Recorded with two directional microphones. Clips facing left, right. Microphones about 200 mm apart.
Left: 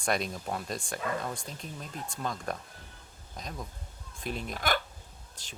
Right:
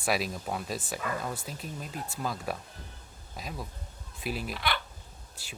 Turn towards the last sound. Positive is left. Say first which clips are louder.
# right 2 dB
turn(degrees=-10)  # may be behind; listen again after turning